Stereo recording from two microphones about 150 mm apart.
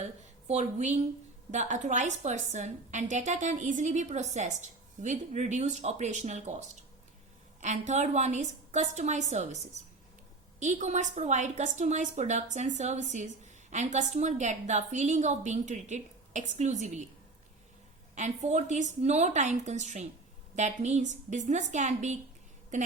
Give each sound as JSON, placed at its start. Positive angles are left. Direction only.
{"t": 0.0, "sound": "a sound", "side_deg": -50}
{"t": 1.5, "sound": "a woman's voice", "side_deg": -55}
{"t": 18.1, "sound": "a woman's voice", "side_deg": -50}